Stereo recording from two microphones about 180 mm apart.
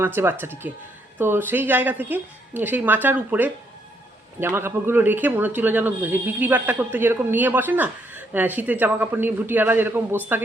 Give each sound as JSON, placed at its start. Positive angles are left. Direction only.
{"t": 0.0, "sound": "speech", "side_deg": -10}